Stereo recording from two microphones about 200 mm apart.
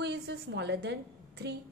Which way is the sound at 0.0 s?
55° right (ahead or behind).